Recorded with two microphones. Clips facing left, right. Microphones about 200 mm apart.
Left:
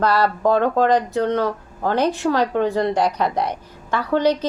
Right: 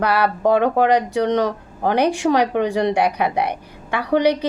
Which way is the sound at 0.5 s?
15° right (ahead or behind).